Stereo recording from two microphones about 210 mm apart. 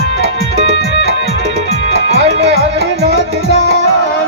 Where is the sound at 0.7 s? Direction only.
50° right (ahead or behind).